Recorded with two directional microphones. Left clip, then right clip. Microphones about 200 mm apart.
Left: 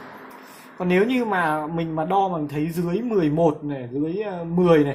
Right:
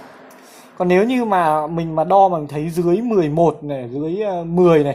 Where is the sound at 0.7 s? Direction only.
30° right (ahead or behind).